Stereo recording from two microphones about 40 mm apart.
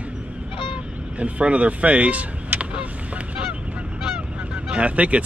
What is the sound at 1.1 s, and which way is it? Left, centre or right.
Speech, right.